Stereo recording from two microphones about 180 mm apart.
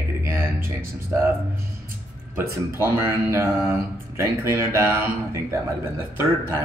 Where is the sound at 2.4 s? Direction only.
15° right (ahead or behind).